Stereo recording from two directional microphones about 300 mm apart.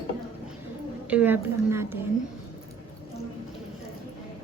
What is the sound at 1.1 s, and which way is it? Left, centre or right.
Speech, centre.